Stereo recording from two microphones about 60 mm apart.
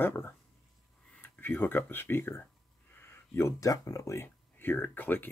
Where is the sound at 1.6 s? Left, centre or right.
Left.